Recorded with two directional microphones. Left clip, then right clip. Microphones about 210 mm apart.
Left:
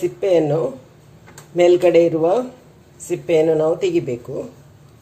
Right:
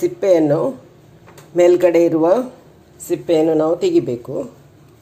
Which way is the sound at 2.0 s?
20° right (ahead or behind).